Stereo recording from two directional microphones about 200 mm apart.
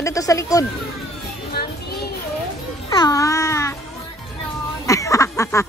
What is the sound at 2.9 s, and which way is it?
Babbling, 15° left (ahead or behind).